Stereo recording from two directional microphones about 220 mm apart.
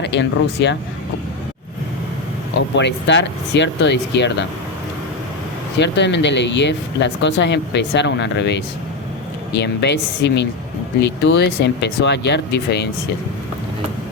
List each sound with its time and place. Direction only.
0.0 s speech: 50° left (ahead or behind)
2.6 s speech: 55° left (ahead or behind)
5.7 s speech: 50° left (ahead or behind)